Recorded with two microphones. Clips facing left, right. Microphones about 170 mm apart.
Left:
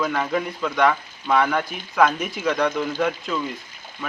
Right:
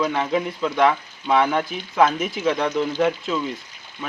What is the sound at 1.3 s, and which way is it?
Speech, 5° right (ahead or behind).